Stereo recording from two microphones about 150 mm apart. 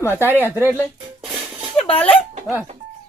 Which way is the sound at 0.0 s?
15° left (ahead or behind).